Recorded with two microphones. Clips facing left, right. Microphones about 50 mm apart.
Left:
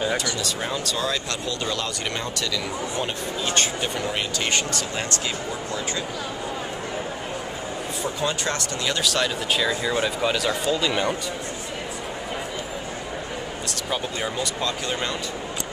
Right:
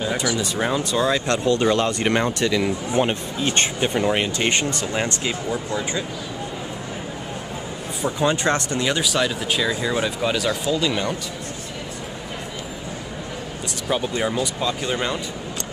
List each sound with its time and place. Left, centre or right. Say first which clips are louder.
0.4 s speech: right 5 dB; centre
1.3 s speech: right 9 dB; right
5.5 s speech: right 4 dB; centre
8.0 s speech: right 6 dB; right; by 11.1 s centre
13.8 s speech: right 6 dB; centre